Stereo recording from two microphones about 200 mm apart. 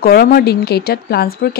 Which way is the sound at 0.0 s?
50° left (ahead or behind).